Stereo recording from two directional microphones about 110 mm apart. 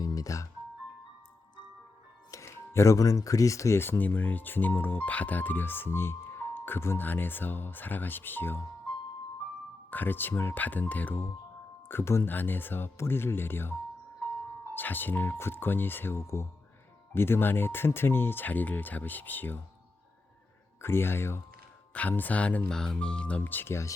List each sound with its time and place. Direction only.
0.0 s music: 35° left (ahead or behind)
2.3 s speech: 25° left (ahead or behind)
9.9 s speech: 15° left (ahead or behind)
14.8 s speech: 15° left (ahead or behind)
20.8 s speech: 20° left (ahead or behind)